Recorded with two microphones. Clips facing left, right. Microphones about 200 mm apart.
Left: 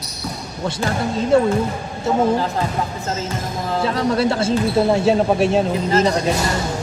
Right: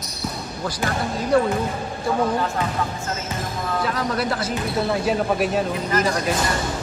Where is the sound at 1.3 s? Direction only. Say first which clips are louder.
Left 3 dB; 25° left (ahead or behind).